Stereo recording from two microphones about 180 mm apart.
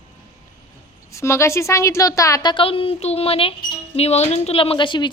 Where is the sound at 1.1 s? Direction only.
15° left (ahead or behind).